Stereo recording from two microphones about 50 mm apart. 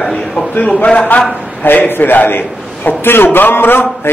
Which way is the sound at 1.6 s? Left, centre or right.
Left.